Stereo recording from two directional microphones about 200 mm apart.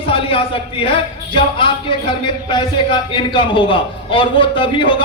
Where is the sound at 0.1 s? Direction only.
25° left (ahead or behind).